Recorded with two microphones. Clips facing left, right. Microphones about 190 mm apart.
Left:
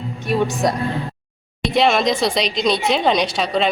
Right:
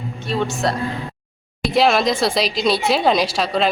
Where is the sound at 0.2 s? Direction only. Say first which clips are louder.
Left 3 dB; 15° left (ahead or behind).